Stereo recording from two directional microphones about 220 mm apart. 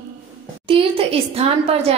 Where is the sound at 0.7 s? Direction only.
25° right (ahead or behind).